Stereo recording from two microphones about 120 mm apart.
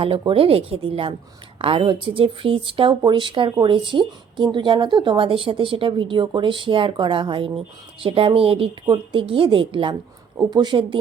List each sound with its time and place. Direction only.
0.0 s speech: 50° right (ahead or behind)